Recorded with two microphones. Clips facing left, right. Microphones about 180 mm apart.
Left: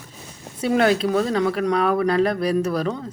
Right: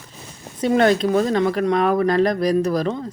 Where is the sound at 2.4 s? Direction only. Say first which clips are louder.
Right 2 dB; 40° right (ahead or behind).